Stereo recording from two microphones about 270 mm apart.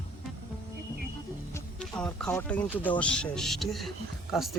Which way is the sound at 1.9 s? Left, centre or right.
Centre.